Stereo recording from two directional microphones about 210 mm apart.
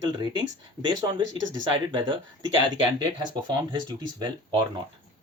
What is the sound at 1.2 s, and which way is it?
Speech, 65° right (ahead or behind).